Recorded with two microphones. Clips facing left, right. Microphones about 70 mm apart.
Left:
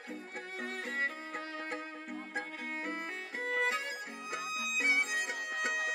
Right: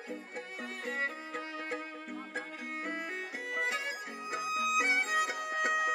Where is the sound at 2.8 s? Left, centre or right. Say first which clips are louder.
Right 3 dB; left.